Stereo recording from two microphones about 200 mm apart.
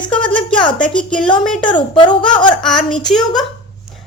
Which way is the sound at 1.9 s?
25° left (ahead or behind).